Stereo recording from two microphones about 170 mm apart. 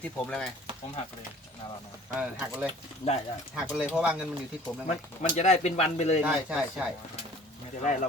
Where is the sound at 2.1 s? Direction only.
10° right (ahead or behind).